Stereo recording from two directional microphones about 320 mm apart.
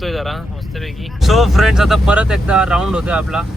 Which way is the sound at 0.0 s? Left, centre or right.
Centre.